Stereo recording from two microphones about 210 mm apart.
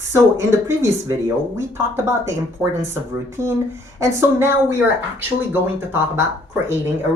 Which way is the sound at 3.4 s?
10° right (ahead or behind).